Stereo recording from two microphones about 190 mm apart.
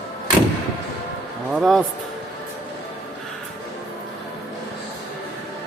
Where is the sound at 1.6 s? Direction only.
Centre (ahead or behind).